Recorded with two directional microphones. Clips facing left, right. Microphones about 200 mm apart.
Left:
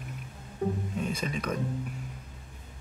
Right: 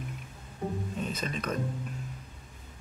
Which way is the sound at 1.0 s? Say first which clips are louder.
Left 2 dB; 10° left (ahead or behind).